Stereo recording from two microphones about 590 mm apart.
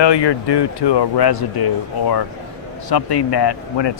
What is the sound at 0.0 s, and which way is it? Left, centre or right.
Speech, left.